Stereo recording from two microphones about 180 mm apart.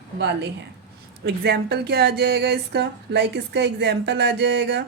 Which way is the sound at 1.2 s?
65° right (ahead or behind).